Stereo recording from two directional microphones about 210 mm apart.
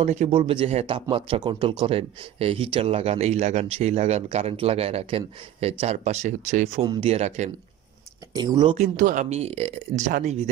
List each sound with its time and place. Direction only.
0.0 s speech: 35° right (ahead or behind)
8.3 s speech: 20° right (ahead or behind)
8.7 s speech: 35° right (ahead or behind)